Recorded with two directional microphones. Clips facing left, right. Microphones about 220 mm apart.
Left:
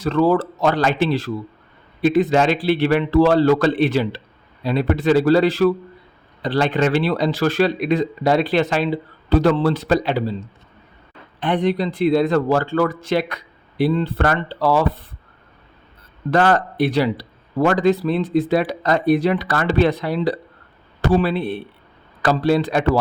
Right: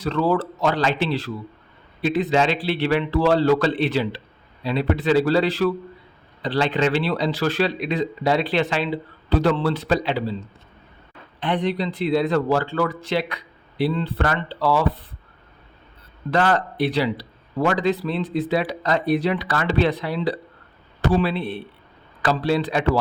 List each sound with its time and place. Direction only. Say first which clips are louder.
0.0 s speech: left 4 dB; 45° left (ahead or behind)
11.3 s speech: left 4 dB; 45° left (ahead or behind)
16.3 s speech: left 3 dB; 50° left (ahead or behind)